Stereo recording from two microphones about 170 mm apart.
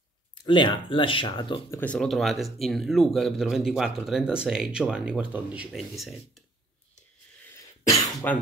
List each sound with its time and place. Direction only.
0.4 s speech: 30° left (ahead or behind)
1.7 s speech: 10° left (ahead or behind)
2.0 s speech: centre (ahead or behind)
7.9 s cough: 15° left (ahead or behind)